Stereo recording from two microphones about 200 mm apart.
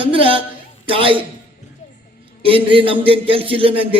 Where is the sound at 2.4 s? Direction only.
25° right (ahead or behind).